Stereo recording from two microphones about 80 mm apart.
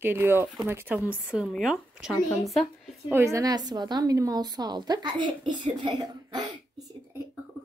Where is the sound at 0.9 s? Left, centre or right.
Centre.